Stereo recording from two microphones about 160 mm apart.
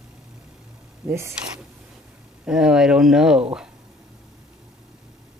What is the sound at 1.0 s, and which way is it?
Speech, 15° right (ahead or behind).